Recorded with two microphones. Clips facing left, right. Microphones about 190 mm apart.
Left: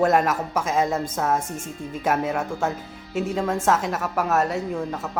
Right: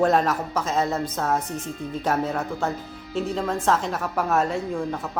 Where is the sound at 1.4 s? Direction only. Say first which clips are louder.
Right 1 dB; 45° left (ahead or behind).